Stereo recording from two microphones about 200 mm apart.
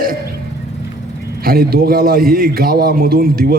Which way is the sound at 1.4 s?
50° right (ahead or behind).